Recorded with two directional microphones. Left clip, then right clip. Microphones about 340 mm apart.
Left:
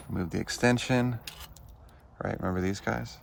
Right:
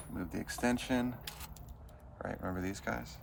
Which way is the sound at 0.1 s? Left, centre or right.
Left.